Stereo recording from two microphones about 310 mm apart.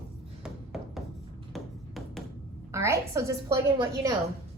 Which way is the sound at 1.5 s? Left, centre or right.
Centre.